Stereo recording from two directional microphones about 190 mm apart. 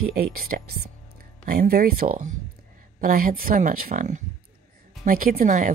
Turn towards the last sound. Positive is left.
turn(degrees=-45)  # may be behind; listen again after turning